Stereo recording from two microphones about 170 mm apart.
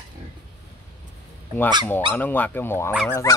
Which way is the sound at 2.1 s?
10° left (ahead or behind).